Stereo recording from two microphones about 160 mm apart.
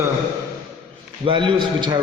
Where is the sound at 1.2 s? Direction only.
30° right (ahead or behind).